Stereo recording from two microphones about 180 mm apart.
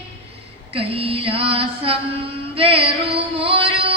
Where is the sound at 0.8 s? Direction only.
30° right (ahead or behind).